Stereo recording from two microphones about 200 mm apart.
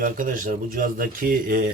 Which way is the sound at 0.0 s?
45° right (ahead or behind).